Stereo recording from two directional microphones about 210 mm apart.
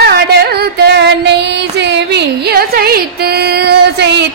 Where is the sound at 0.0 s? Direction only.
50° right (ahead or behind).